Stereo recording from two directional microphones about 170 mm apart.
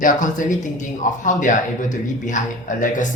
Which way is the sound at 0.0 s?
50° left (ahead or behind).